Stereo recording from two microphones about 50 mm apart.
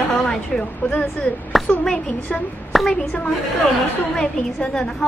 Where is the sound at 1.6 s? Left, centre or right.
Centre.